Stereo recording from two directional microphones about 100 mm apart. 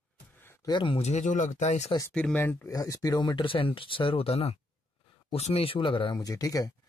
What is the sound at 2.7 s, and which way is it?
Speech, 35° left (ahead or behind).